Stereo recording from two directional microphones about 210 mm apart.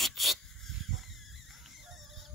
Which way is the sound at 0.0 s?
Centre (ahead or behind).